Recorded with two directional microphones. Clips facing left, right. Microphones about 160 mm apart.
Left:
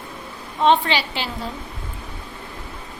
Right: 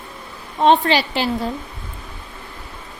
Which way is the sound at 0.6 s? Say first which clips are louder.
Right 3 dB; 40° right (ahead or behind).